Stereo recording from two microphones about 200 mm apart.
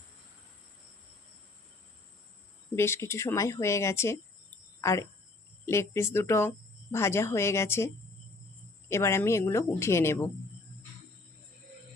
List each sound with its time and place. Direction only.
2.7 s speech: 10° left (ahead or behind)
8.9 s speech: 15° left (ahead or behind)